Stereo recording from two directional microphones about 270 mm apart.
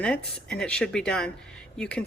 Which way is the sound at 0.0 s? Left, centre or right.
Centre.